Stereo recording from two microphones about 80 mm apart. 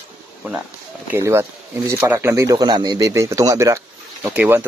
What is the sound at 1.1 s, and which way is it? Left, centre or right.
Speech, right.